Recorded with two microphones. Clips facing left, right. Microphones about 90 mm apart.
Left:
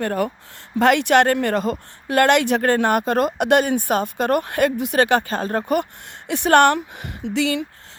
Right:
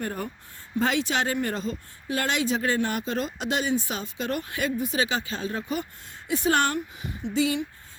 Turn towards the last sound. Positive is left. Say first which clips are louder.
# left 4 dB
turn(degrees=70)  # may be behind; listen again after turning